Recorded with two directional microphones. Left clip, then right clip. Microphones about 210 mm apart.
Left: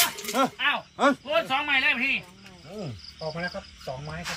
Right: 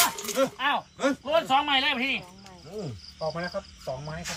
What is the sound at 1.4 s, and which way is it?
Speech, 40° right (ahead or behind).